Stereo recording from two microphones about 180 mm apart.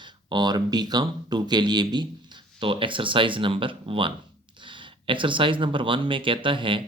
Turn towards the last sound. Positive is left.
turn(degrees=-30)  # may be behind; listen again after turning